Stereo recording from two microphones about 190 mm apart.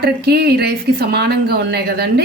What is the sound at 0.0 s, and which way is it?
A woman's voice, 55° right (ahead or behind).